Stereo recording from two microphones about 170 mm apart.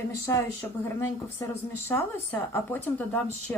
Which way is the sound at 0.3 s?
15° left (ahead or behind).